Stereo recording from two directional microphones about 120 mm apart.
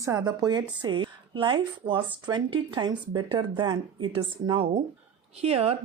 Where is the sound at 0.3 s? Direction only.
35° right (ahead or behind).